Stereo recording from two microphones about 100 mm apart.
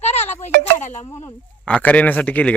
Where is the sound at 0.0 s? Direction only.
90° left.